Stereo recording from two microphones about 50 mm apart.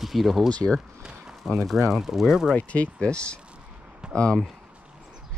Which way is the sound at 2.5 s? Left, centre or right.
Left.